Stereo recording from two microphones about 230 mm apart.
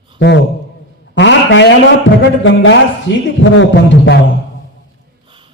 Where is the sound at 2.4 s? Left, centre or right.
Left.